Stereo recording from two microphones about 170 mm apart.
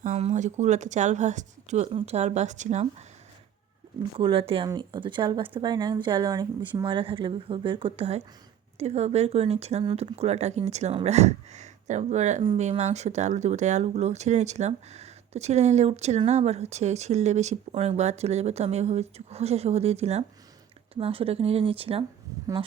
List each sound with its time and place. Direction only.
0.0 s speech: 40° right (ahead or behind)
4.2 s speech: 30° right (ahead or behind)